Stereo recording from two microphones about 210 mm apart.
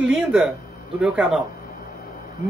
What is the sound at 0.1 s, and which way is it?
Speech, 5° right (ahead or behind).